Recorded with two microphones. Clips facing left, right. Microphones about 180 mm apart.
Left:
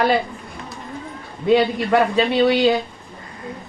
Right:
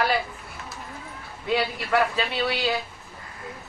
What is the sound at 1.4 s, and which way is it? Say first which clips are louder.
A woman's voice: left 10 dB; 25° left (ahead or behind).